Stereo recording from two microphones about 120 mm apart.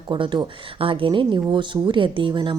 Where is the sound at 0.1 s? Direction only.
40° right (ahead or behind).